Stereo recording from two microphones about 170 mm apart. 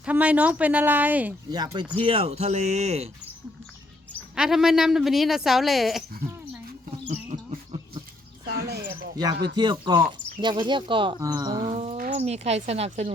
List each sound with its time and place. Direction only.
0.0 s speech: 10° right (ahead or behind)
1.5 s speech: 25° right (ahead or behind); by 3.1 s 40° right (ahead or behind)
4.4 s speech: centre (ahead or behind)
7.1 s a sound: 35° right (ahead or behind)
8.4 s a sound: 70° right (ahead or behind)
9.6 s speech: 25° right (ahead or behind)
12.1 s speech: 40° right (ahead or behind)